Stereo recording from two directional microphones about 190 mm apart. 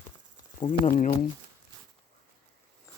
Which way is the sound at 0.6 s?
40° left (ahead or behind).